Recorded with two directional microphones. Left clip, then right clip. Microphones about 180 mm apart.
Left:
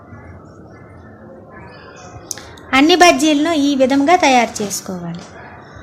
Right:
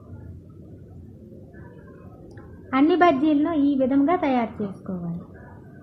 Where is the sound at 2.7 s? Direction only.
15° left (ahead or behind).